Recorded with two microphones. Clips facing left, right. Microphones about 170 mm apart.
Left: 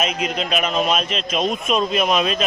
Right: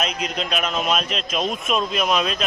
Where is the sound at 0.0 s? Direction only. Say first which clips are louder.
Left 3 dB; 5° left (ahead or behind).